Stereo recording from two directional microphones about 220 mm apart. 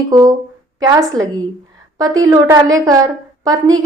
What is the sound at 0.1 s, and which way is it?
A woman's voice, 15° right (ahead or behind).